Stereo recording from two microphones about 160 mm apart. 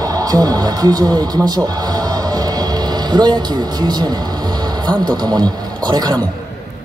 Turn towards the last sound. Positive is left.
turn(degrees=-25)  # may be behind; listen again after turning